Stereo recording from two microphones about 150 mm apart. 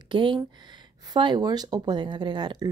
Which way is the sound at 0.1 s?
35° right (ahead or behind).